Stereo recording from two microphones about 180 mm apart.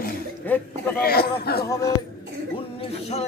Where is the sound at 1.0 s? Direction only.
60° left (ahead or behind).